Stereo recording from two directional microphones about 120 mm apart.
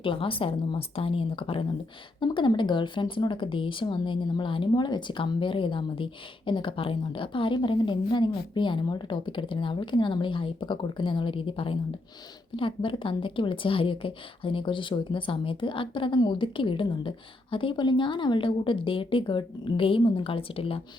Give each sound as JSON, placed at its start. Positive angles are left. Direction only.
{"t": 0.0, "sound": "speech", "side_deg": 45}